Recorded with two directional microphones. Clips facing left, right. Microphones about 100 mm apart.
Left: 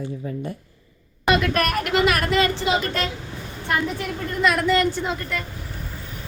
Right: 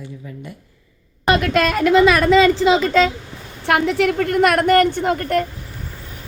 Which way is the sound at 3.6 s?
90° right.